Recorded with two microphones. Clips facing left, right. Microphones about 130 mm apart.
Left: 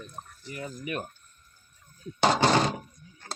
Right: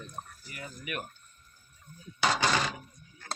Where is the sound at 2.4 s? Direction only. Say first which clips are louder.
Left 6 dB; 35° left (ahead or behind).